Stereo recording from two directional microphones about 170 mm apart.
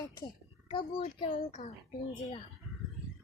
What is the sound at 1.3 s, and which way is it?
Speech, 45° left (ahead or behind).